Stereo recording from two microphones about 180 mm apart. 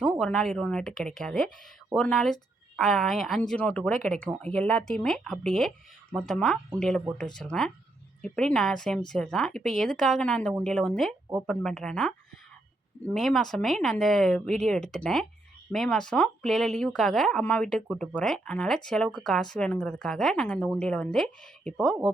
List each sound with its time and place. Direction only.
0.0 s speech: 5° left (ahead or behind)
13.1 s speech: centre (ahead or behind)